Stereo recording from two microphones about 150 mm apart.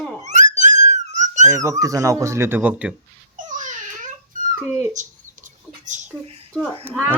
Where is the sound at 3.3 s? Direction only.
55° right (ahead or behind).